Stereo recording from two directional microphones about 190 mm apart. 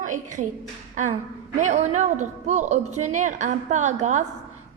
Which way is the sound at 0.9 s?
40° right (ahead or behind).